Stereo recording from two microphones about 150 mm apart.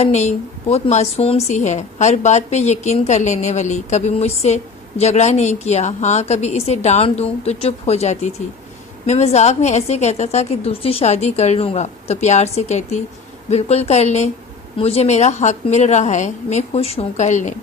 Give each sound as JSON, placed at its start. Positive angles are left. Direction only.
{"t": 0.0, "sound": "speech", "side_deg": 50}